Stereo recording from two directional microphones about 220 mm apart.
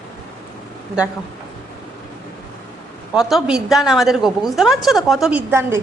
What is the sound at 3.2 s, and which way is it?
A woman's voice, centre (ahead or behind).